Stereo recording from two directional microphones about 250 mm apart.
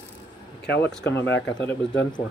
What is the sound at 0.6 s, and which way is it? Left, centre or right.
Speech, left.